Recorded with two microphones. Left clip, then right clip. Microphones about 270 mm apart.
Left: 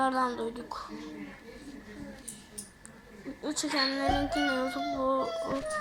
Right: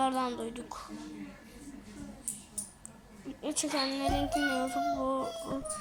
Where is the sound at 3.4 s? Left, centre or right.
Centre.